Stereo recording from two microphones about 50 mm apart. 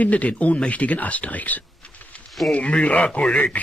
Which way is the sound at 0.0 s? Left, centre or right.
Left.